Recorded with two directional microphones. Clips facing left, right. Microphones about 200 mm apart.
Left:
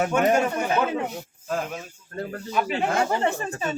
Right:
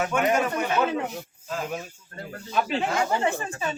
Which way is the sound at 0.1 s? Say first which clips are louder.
Left 3 dB; 35° left (ahead or behind).